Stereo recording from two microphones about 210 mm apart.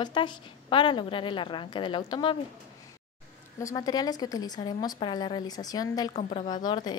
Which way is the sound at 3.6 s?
15° left (ahead or behind).